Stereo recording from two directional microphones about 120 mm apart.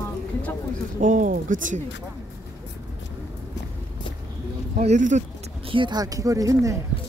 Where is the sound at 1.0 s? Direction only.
90° right.